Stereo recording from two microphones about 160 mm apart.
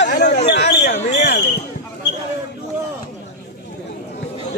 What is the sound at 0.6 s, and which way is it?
Speech, 50° left (ahead or behind).